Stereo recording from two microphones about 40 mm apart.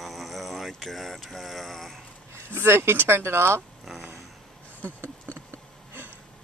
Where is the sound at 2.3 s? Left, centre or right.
Right.